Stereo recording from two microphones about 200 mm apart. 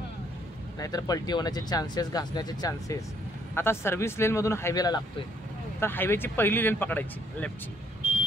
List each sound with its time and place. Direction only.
0.7 s speech: 20° left (ahead or behind)